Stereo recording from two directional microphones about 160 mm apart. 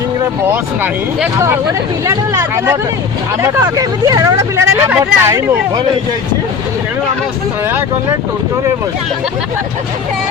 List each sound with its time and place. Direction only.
0.5 s speech: 10° right (ahead or behind)